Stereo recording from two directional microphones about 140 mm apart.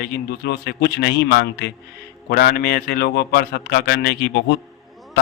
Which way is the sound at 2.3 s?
90° left.